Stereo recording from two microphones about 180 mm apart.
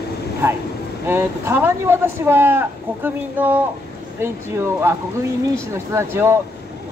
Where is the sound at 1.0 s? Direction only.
15° right (ahead or behind).